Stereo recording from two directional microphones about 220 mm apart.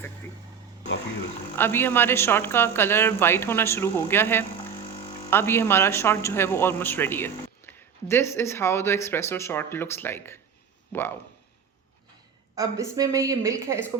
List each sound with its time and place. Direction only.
1.5 s speech: 10° left (ahead or behind)
12.5 s a woman's voice: 15° right (ahead or behind)